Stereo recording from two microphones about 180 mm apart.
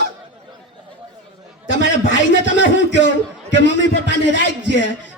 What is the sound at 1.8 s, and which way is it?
A man's voice, 90° left.